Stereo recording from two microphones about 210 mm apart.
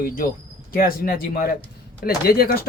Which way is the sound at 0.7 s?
45° left (ahead or behind).